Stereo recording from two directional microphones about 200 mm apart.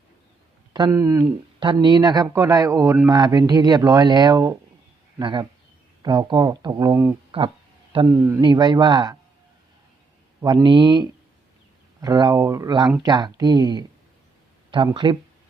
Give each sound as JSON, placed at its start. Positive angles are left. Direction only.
{"t": 0.7, "sound": "speech", "side_deg": -20}
{"t": 7.3, "sound": "a sound", "side_deg": -25}
{"t": 8.0, "sound": "speech", "side_deg": -15}
{"t": 10.4, "sound": "speech", "side_deg": -20}
{"t": 14.9, "sound": "speech", "side_deg": -20}